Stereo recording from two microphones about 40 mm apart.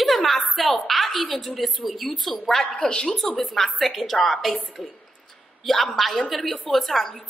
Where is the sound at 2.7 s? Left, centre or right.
Centre.